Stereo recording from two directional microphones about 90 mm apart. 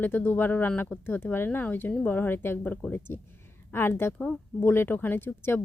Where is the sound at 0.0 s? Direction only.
25° left (ahead or behind).